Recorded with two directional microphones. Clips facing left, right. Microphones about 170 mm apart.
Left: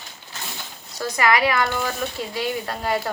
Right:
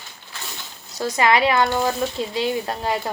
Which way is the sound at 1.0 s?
25° right (ahead or behind).